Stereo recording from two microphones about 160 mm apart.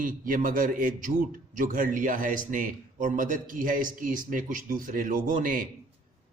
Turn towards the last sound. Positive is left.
turn(degrees=-60)  # may be behind; listen again after turning